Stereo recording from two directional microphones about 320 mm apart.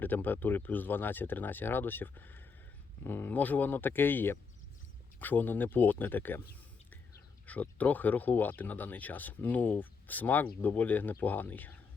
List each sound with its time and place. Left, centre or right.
0.0 s speech: centre
7.4 s speech: centre